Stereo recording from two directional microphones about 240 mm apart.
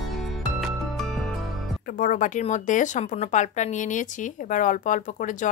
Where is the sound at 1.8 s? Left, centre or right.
Left.